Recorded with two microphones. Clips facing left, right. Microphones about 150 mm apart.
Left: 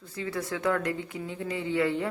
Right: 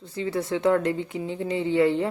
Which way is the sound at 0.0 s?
25° right (ahead or behind).